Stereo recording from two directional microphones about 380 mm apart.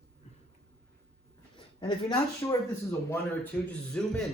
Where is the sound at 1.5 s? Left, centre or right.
Centre.